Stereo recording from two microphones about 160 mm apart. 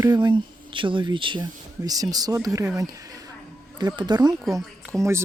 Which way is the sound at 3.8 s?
25° right (ahead or behind).